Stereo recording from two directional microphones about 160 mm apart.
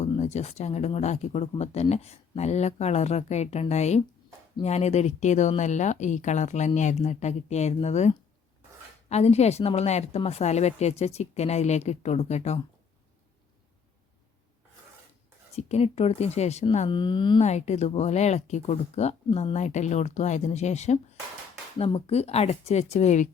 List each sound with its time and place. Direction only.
0.2 s speech: 45° left (ahead or behind)
15.5 s speech: 40° left (ahead or behind)
16.9 s speech: 30° left (ahead or behind)
17.4 s speech: 45° left (ahead or behind)